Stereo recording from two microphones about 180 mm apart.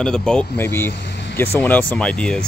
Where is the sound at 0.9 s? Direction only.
75° left (ahead or behind).